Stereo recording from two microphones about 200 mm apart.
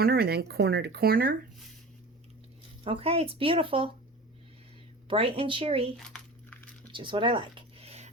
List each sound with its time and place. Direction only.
0.0 s speech: 50° right (ahead or behind)
2.8 s speech: 30° right (ahead or behind)
5.0 s speech: 25° right (ahead or behind)
6.0 s crumpling: 5° left (ahead or behind)
6.9 s a sound: 25° right (ahead or behind)